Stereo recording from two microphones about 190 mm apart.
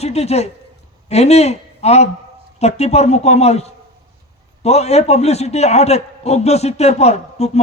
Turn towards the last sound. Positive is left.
turn(degrees=35)  # may be behind; listen again after turning